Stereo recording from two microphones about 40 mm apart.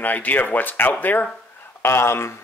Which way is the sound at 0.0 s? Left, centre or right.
Left.